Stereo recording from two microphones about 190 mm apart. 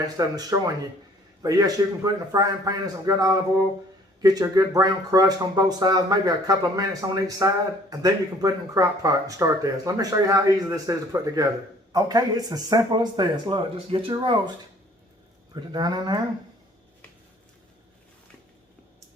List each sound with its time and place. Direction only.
0.0 s a man's voice: 20° right (ahead or behind)
15.5 s speech: 20° right (ahead or behind)